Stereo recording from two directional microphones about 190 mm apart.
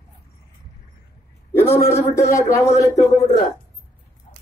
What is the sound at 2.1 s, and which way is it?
Speech, 15° left (ahead or behind).